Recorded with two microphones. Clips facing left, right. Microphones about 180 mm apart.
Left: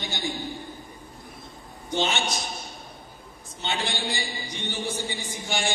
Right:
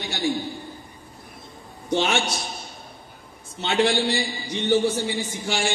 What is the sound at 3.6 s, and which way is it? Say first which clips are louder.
A man's voice: right 9 dB; 75° right (ahead or behind).